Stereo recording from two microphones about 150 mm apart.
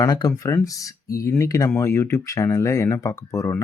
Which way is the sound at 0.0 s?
25° left (ahead or behind).